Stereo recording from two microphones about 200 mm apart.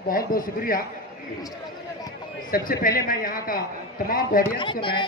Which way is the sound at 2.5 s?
50° left (ahead or behind).